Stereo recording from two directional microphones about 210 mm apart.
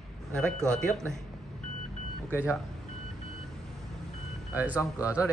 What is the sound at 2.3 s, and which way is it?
Speech, 10° left (ahead or behind).